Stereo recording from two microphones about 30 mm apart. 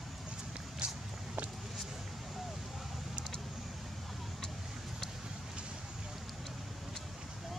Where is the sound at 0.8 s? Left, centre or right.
Right.